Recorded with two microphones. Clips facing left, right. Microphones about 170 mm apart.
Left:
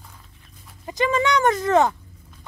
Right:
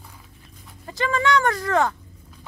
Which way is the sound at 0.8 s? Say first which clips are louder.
Left 1 dB; 20° left (ahead or behind).